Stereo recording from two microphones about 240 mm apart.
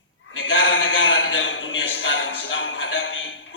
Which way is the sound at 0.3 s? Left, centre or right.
Left.